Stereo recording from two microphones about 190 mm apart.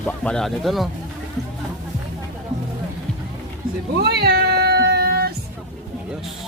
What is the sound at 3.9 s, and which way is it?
Cat, 60° right (ahead or behind).